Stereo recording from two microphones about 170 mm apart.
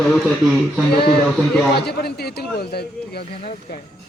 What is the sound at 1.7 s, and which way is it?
A man's voice, 70° left (ahead or behind).